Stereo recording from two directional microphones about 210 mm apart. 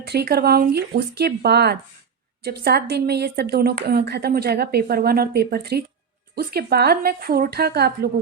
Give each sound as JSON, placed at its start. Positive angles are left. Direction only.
{"t": 0.1, "sound": "speech", "side_deg": -50}